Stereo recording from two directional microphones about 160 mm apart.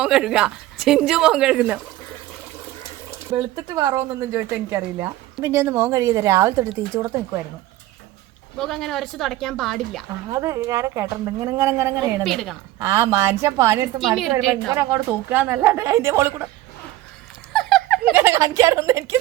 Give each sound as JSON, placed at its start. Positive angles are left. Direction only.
{"t": 0.0, "sound": "a woman's voice", "side_deg": -5}
{"t": 3.5, "sound": "a woman's voice", "side_deg": -25}
{"t": 8.5, "sound": "a woman's voice", "side_deg": 0}
{"t": 10.2, "sound": "speech", "side_deg": -20}
{"t": 12.2, "sound": "a woman's voice", "side_deg": 0}
{"t": 12.8, "sound": "a woman's voice", "side_deg": -15}
{"t": 14.0, "sound": "a woman's voice", "side_deg": 0}
{"t": 14.7, "sound": "a woman's voice", "side_deg": -20}
{"t": 17.5, "sound": "a sound", "side_deg": 0}
{"t": 18.1, "sound": "speech", "side_deg": -15}